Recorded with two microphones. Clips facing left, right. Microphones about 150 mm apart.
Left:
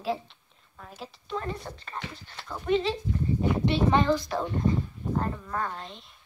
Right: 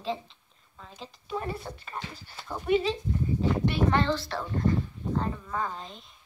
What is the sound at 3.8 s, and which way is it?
Speech, 15° left (ahead or behind).